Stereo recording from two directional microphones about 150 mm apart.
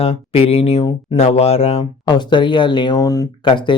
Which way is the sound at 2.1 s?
30° left (ahead or behind).